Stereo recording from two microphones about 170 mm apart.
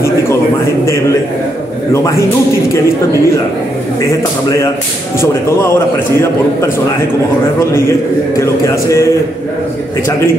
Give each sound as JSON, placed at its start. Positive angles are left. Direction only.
{"t": 4.0, "sound": "speech", "side_deg": 15}
{"t": 8.4, "sound": "speech", "side_deg": 15}